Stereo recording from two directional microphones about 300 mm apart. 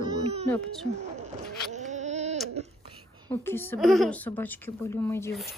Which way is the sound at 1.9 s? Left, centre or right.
Right.